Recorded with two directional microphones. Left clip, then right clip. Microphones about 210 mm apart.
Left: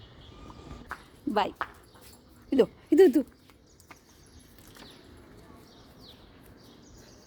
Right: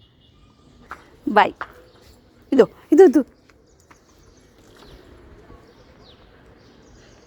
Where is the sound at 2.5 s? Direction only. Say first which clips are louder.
Right 9 dB; 15° right (ahead or behind).